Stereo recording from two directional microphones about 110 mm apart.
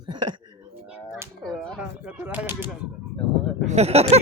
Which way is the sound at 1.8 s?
15° right (ahead or behind).